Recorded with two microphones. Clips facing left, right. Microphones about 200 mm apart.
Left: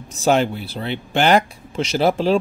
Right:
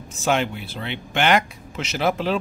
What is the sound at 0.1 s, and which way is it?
Speech, 35° left (ahead or behind).